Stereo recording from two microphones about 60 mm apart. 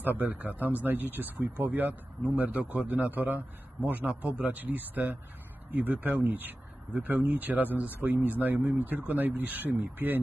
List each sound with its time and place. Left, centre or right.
0.0 s a man's voice: right